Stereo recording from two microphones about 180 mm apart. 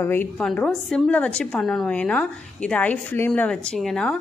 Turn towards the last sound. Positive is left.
turn(degrees=5)  # may be behind; listen again after turning